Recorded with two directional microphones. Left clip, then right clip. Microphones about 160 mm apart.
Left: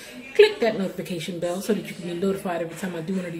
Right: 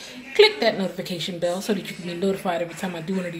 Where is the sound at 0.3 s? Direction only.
5° left (ahead or behind).